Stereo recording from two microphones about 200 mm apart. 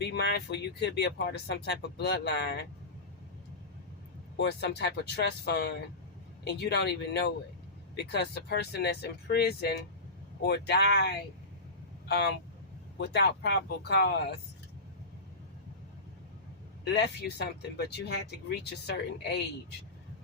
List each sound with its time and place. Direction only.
0.0 s speech: 60° left (ahead or behind)
4.4 s speech: 55° left (ahead or behind)
16.8 s speech: 55° left (ahead or behind)